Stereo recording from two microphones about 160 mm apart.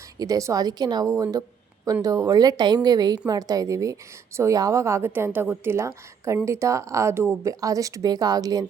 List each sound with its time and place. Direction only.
0.2 s a woman's voice: 20° right (ahead or behind)